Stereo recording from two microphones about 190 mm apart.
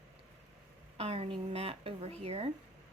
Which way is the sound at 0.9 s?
30° right (ahead or behind).